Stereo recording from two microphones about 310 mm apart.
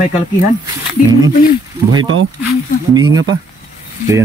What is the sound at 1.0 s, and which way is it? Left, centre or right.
Speech, left.